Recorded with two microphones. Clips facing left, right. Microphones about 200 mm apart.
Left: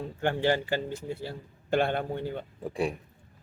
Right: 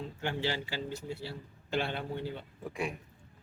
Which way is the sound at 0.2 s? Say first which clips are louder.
Left 8 dB; 50° left (ahead or behind).